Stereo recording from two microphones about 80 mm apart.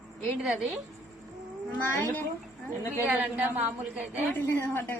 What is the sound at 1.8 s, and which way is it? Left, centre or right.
Speech, left.